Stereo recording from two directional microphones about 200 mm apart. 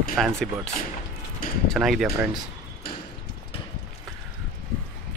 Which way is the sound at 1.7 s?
Centre (ahead or behind).